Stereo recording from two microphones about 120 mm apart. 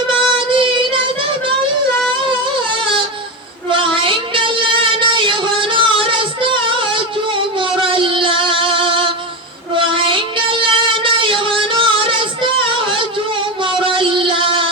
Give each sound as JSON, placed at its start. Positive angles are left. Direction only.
{"t": 0.3, "sound": "child singing", "side_deg": -45}
{"t": 2.7, "sound": "a sound", "side_deg": -45}
{"t": 3.7, "sound": "child singing", "side_deg": -45}
{"t": 13.6, "sound": "music", "side_deg": -45}